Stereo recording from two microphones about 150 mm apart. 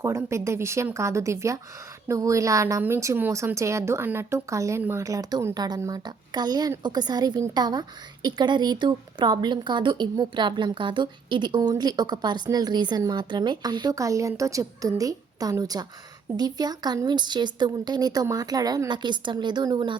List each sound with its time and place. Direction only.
0.0 s a woman's voice: 20° right (ahead or behind)